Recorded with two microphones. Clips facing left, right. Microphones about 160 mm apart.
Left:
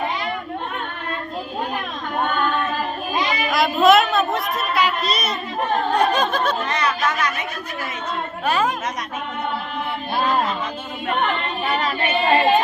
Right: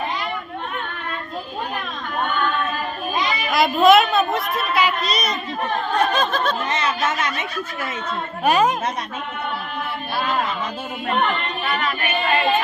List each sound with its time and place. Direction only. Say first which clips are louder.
3.5 s a child's voice: right 1 dB; centre (ahead or behind)
6.7 s speech: even; 25° right (ahead or behind)
8.4 s a woman's voice: right 4 dB; 15° right (ahead or behind)
11.7 s female singing: left 2 dB; 35° left (ahead or behind)